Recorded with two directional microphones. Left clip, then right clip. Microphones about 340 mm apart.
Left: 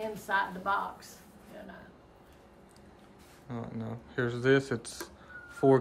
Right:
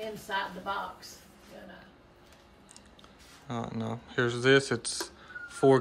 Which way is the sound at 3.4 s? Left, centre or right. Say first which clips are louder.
Right 5 dB; centre.